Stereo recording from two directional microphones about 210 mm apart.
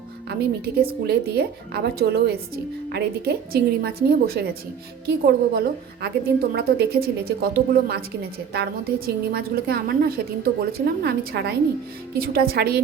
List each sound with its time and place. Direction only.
0.3 s a woman's voice: 45° right (ahead or behind)
9.0 s a woman's voice: 50° right (ahead or behind)